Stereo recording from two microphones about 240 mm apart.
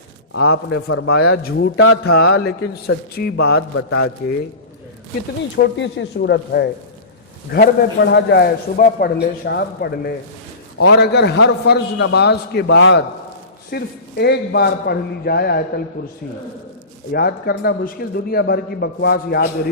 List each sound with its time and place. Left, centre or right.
0.3 s a man's voice: left
0.9 s speech: left
1.7 s mantra: left
2.4 s a man's voice: left
3.8 s mantra: left
5.6 s a man's voice: left
17.1 s a man's voice: left